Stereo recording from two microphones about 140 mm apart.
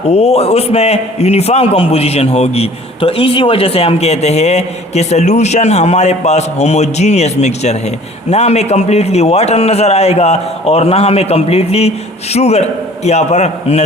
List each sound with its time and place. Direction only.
0.1 s a man's voice: 50° left (ahead or behind)